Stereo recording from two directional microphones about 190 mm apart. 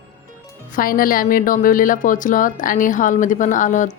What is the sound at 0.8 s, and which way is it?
A woman's voice, 50° left (ahead or behind).